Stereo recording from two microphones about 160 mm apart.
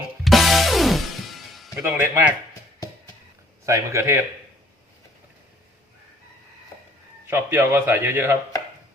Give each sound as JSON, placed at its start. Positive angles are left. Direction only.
{"t": 0.3, "sound": "music", "side_deg": 0}
{"t": 1.9, "sound": "a man's voice", "side_deg": -15}
{"t": 3.7, "sound": "a man's voice", "side_deg": -15}
{"t": 7.3, "sound": "a man's voice", "side_deg": -15}